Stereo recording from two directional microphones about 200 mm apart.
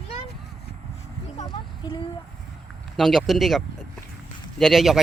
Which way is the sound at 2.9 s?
Centre (ahead or behind).